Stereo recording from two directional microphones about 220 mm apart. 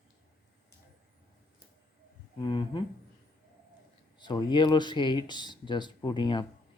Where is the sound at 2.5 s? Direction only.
20° left (ahead or behind).